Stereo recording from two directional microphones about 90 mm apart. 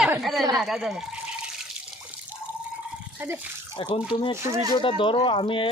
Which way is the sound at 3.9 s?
80° left.